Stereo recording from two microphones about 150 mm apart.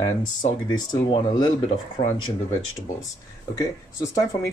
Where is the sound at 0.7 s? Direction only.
30° left (ahead or behind).